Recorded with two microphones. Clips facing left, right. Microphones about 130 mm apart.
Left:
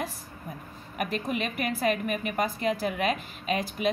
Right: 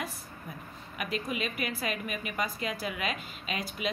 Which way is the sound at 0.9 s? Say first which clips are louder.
Left 4 dB; 50° left (ahead or behind).